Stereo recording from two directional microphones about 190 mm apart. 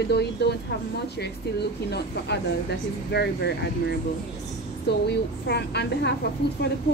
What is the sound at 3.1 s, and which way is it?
Speech, 55° left (ahead or behind).